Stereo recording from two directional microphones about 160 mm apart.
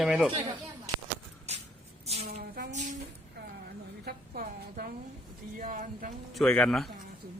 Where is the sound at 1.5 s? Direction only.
45° right (ahead or behind).